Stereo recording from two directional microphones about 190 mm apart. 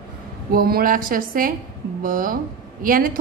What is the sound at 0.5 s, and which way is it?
A woman's voice, 50° right (ahead or behind).